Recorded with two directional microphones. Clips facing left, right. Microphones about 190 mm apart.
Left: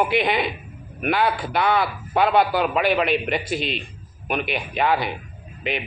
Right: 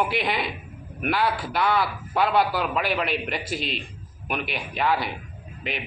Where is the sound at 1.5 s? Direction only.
60° left (ahead or behind).